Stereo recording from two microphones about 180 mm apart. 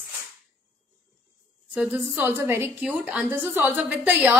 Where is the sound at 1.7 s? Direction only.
10° right (ahead or behind).